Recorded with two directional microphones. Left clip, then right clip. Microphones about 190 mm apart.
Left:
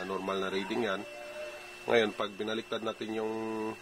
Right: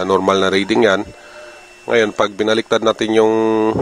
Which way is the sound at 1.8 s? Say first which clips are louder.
Right 14 dB; 30° right (ahead or behind).